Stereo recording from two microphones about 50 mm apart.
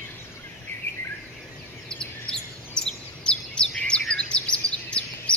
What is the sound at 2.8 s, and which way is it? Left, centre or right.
Chirp, centre.